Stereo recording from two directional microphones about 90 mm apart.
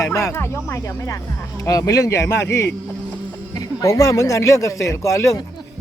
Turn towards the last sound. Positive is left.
turn(degrees=40)  # may be behind; listen again after turning